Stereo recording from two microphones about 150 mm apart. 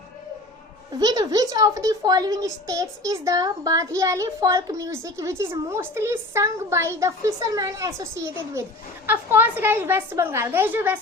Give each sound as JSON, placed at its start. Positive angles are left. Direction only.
{"t": 0.9, "sound": "a woman's voice", "side_deg": -25}